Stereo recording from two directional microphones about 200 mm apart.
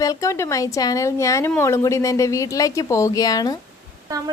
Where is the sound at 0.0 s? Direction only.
15° left (ahead or behind).